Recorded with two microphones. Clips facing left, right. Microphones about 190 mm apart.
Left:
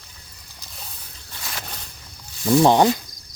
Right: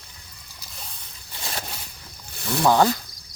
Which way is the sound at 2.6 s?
20° left (ahead or behind).